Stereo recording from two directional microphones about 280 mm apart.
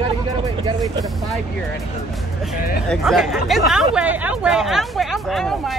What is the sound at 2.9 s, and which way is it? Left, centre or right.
Speech, centre.